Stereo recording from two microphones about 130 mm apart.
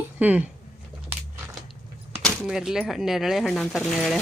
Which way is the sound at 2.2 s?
Centre (ahead or behind).